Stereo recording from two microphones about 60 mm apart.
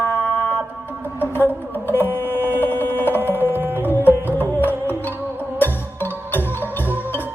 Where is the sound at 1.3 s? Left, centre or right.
Left.